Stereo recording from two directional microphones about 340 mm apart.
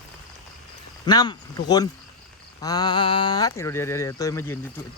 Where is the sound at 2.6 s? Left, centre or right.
Centre.